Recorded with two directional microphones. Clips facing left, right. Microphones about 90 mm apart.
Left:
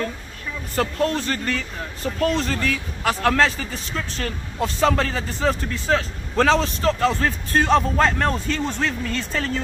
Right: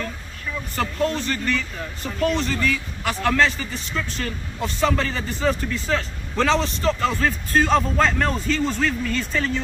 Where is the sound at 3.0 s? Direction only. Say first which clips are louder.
Left 1 dB; 55° left (ahead or behind); by 6.5 s 40° left (ahead or behind).